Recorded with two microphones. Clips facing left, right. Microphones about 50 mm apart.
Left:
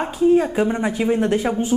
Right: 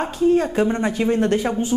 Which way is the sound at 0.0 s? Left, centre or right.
Centre.